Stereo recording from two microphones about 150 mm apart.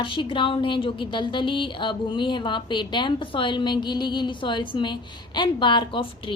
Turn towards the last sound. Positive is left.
turn(degrees=35)  # may be behind; listen again after turning